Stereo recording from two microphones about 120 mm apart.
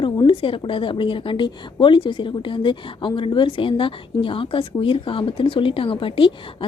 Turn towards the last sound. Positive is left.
turn(degrees=45)  # may be behind; listen again after turning